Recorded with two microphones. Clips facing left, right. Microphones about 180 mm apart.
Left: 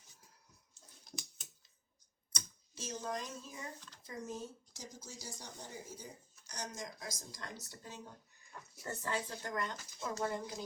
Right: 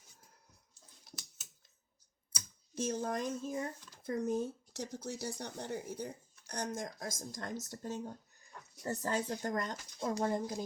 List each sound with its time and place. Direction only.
2.3 s computer keyboard: 10° right (ahead or behind)
2.7 s speech: 55° right (ahead or behind)